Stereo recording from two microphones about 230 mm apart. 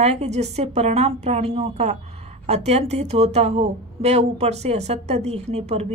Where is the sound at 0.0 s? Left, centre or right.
Right.